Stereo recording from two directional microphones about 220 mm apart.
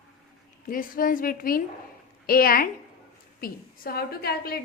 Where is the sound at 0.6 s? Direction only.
40° left (ahead or behind).